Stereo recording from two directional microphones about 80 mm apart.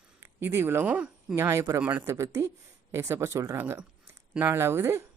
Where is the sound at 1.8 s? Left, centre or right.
Right.